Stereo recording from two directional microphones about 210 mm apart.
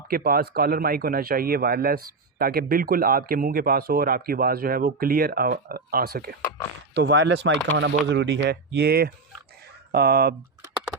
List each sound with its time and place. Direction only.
0.1 s speech: 45° right (ahead or behind)